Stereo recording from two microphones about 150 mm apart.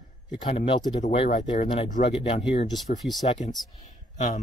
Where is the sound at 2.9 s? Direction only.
60° left (ahead or behind).